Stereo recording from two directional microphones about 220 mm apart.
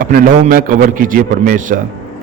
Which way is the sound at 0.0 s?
40° right (ahead or behind).